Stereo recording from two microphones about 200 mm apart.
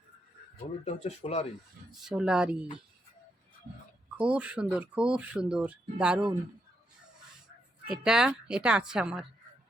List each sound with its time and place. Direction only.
0.9 s speech: 35° left (ahead or behind)
2.0 s speech: 5° right (ahead or behind)
4.2 s speech: 5° right (ahead or behind)
7.9 s speech: 5° right (ahead or behind)